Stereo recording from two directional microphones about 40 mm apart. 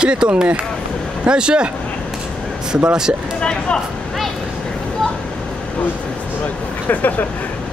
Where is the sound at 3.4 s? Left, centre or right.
Left.